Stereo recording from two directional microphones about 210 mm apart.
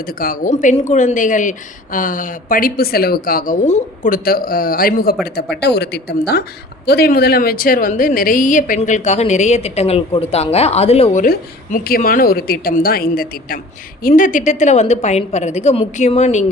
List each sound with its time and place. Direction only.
0.0 s a woman's voice: 45° left (ahead or behind)